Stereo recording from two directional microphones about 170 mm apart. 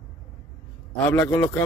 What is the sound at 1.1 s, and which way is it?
Speech, 15° left (ahead or behind).